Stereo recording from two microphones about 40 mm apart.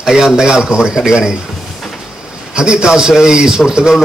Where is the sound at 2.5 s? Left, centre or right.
Right.